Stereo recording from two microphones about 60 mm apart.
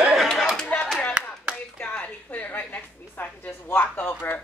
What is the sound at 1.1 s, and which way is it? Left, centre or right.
Clapping, centre.